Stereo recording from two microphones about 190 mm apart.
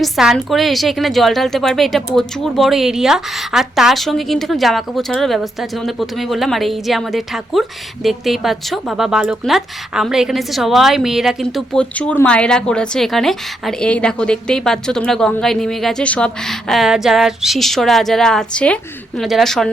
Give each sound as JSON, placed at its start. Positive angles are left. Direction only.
{"t": 0.0, "sound": "speech", "side_deg": 0}